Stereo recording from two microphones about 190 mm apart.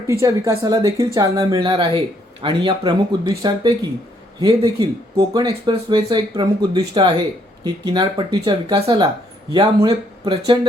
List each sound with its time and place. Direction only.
0.1 s speech: 15° right (ahead or behind)